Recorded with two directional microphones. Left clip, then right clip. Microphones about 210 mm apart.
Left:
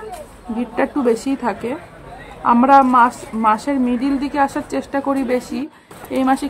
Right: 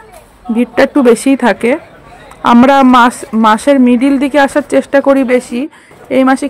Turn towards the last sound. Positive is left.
turn(degrees=-25)  # may be behind; listen again after turning